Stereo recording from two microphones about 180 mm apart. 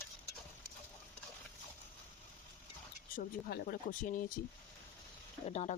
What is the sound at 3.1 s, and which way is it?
Speech, 55° left (ahead or behind).